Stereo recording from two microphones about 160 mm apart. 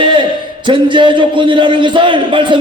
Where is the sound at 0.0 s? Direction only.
30° right (ahead or behind).